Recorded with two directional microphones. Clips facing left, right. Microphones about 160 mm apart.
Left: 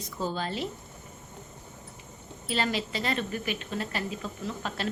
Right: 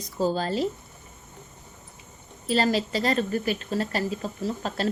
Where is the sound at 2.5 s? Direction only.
40° right (ahead or behind).